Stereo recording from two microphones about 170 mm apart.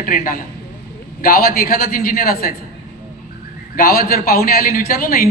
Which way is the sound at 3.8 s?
60° left (ahead or behind).